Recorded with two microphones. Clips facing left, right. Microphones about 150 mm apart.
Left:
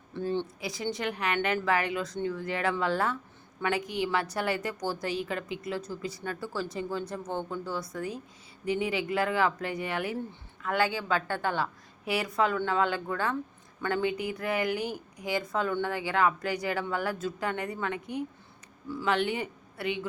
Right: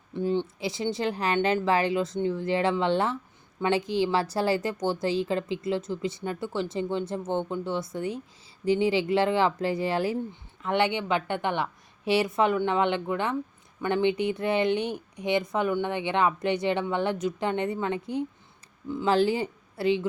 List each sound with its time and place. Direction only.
0.1 s speech: 15° right (ahead or behind)
0.6 s a woman's voice: 25° right (ahead or behind)